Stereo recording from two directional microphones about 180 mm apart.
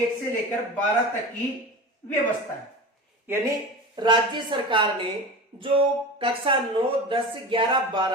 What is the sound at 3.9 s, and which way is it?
Speech, 25° right (ahead or behind).